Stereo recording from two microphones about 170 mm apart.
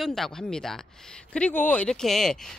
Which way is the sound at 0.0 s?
Centre (ahead or behind).